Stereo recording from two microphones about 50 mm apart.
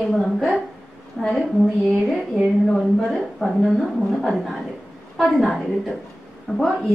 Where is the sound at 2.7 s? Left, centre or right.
Centre.